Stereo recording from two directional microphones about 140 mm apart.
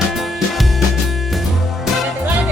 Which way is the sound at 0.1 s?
Centre (ahead or behind).